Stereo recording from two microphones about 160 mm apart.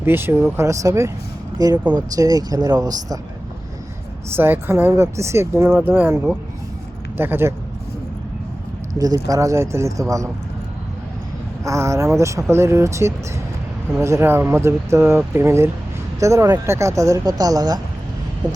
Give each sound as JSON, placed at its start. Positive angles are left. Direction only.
{"t": 0.0, "sound": "speech", "side_deg": -15}
{"t": 4.3, "sound": "speech", "side_deg": -15}
{"t": 9.0, "sound": "speech", "side_deg": -20}
{"t": 11.6, "sound": "a sound", "side_deg": -20}
{"t": 12.2, "sound": "speech", "side_deg": -20}